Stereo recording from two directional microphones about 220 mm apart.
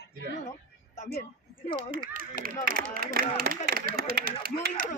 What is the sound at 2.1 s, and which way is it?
Speech, 40° right (ahead or behind).